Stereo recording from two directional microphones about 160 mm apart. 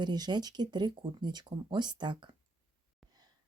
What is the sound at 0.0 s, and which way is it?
Speech, 25° right (ahead or behind).